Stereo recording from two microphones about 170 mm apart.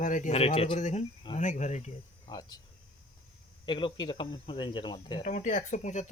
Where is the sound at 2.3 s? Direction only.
20° left (ahead or behind).